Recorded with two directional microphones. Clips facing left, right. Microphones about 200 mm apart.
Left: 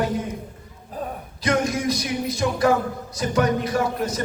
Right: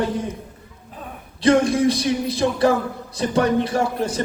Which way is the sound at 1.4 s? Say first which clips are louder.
Right 6 dB; 30° right (ahead or behind).